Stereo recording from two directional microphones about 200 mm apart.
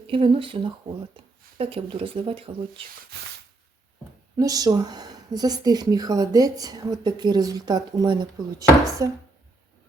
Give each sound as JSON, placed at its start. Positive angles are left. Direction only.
{"t": 0.1, "sound": "speech", "side_deg": -25}
{"t": 4.4, "sound": "speech", "side_deg": -20}